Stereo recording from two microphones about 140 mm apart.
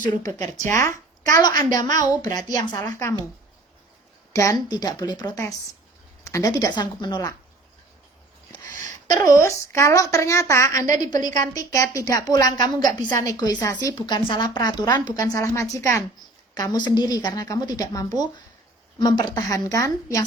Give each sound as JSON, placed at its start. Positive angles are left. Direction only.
{"t": 0.7, "sound": "speech", "side_deg": 20}
{"t": 4.3, "sound": "speech", "side_deg": 20}
{"t": 9.0, "sound": "speech", "side_deg": 25}